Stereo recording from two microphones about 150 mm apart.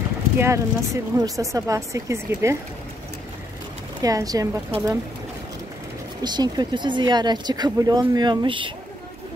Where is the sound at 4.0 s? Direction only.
25° right (ahead or behind).